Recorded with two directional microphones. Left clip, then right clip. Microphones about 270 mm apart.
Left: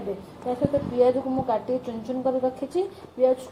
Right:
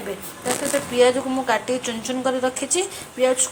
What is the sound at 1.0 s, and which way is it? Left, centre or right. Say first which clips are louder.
Speech: right 4 dB; right.